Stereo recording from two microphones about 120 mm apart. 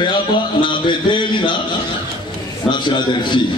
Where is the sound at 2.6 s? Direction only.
40° left (ahead or behind).